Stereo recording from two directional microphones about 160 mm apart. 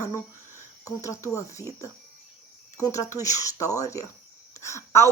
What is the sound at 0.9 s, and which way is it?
Speech, 20° left (ahead or behind).